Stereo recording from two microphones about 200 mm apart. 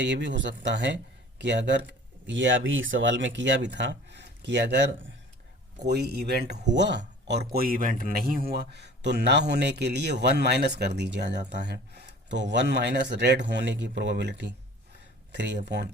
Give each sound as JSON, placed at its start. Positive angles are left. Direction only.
{"t": 0.0, "sound": "speech", "side_deg": -65}